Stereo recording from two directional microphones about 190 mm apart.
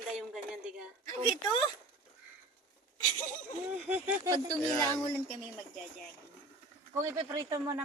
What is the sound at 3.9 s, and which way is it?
Speech, 10° right (ahead or behind).